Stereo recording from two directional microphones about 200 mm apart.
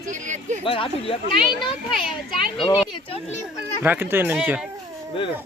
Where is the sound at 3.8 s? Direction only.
10° right (ahead or behind).